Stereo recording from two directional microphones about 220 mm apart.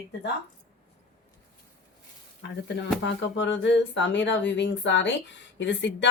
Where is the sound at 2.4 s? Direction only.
55° left (ahead or behind).